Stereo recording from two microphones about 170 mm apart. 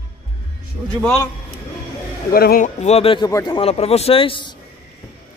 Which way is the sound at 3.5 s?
35° left (ahead or behind).